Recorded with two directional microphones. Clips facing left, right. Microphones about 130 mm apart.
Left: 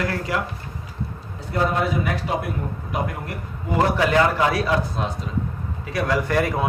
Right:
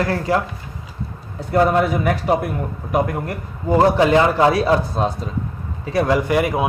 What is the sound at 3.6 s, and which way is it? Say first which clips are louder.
A man's voice: right 6 dB; 30° right (ahead or behind).